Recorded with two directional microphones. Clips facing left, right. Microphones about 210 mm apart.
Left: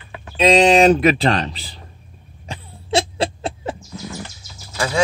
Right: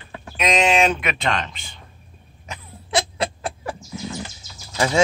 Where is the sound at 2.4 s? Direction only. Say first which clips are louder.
Left 4 dB; 30° left (ahead or behind).